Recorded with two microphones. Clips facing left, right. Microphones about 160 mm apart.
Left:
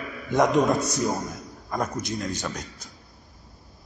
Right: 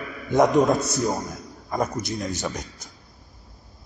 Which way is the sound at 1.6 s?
5° right (ahead or behind).